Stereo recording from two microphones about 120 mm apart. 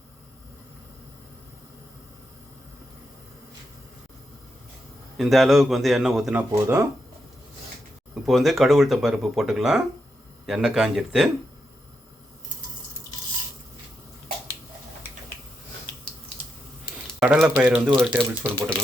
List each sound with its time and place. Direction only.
5.1 s speech: centre (ahead or behind)
6.5 s speech: 25° right (ahead or behind)
8.1 s speech: centre (ahead or behind)
17.2 s speech: 5° right (ahead or behind)
18.2 s speech: 10° left (ahead or behind)